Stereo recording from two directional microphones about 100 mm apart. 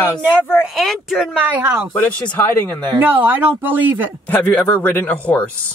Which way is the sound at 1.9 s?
15° left (ahead or behind).